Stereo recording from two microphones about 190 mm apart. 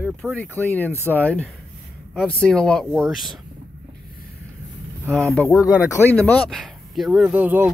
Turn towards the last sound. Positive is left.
turn(degrees=-10)  # may be behind; listen again after turning